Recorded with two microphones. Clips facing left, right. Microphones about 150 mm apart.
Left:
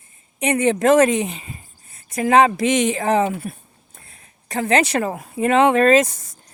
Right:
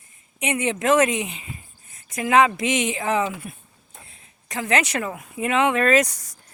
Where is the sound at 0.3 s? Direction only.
40° left (ahead or behind).